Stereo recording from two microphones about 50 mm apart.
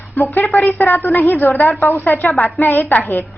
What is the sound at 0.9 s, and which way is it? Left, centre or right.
Speech, left.